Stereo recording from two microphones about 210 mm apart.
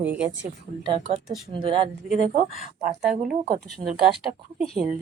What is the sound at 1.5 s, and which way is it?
Speech, 25° right (ahead or behind).